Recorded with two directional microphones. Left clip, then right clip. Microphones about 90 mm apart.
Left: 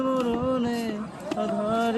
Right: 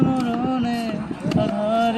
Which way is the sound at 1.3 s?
35° left (ahead or behind).